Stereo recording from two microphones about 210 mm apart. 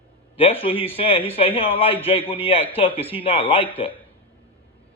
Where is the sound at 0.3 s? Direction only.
25° left (ahead or behind).